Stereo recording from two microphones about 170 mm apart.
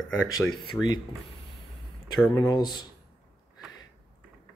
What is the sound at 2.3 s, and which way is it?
Speech, 25° left (ahead or behind).